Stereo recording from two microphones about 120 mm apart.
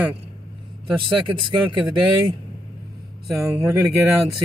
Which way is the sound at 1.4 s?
40° right (ahead or behind).